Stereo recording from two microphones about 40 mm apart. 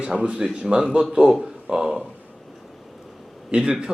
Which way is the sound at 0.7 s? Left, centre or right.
Right.